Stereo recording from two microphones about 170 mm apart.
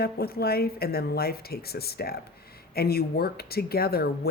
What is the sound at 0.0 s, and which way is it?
Speech, 65° left (ahead or behind).